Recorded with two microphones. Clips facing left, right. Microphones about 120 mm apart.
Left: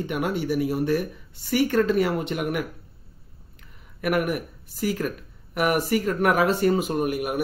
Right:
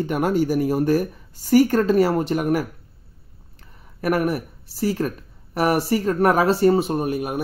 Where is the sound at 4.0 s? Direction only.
35° right (ahead or behind).